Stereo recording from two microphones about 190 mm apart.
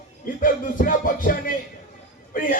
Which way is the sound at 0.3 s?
45° left (ahead or behind).